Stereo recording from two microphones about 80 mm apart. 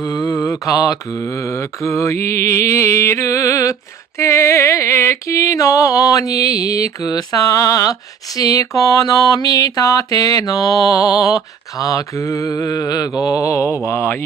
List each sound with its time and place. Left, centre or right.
0.0 s mantra: left
0.3 s mantra: left
4.2 s music: left